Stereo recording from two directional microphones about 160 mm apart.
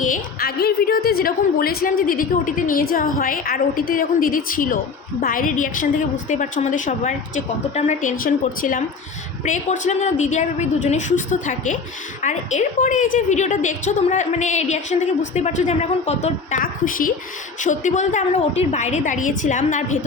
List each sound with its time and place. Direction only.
0.0 s a woman's voice: 60° left (ahead or behind)
9.4 s a woman's voice: 50° left (ahead or behind)